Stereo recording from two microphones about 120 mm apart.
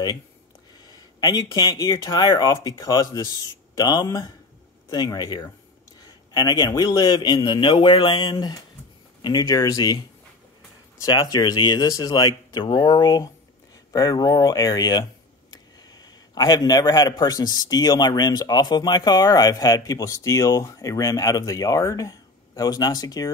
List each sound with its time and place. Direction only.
0.7 s a man's voice: 35° left (ahead or behind)
5.9 s a sound: 35° left (ahead or behind)
6.7 s a man's voice: 30° left (ahead or behind)
11.1 s a man's voice: 30° left (ahead or behind)